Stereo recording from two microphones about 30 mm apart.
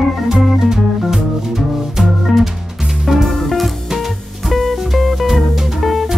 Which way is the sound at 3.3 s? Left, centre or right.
Centre.